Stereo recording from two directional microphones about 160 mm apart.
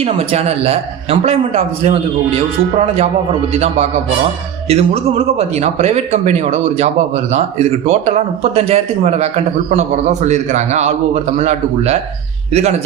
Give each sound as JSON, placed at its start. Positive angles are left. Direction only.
{"t": 0.0, "sound": "a man's voice", "side_deg": -40}